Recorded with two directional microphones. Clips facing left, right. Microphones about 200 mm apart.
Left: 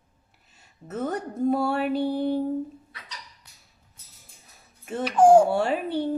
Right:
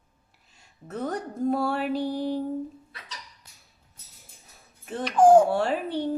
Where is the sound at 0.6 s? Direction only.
5° left (ahead or behind).